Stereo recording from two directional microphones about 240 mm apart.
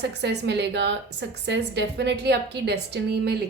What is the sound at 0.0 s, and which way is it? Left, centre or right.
A woman's voice, right.